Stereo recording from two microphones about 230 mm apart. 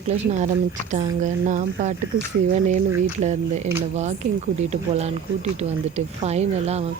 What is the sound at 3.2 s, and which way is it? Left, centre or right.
A woman's voice, right.